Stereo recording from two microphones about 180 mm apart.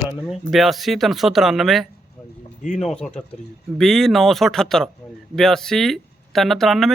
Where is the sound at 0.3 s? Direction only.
Centre (ahead or behind).